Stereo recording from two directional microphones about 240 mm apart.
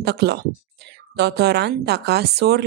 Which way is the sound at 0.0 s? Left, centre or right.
Right.